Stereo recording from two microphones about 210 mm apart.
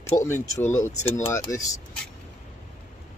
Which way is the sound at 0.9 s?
30° left (ahead or behind).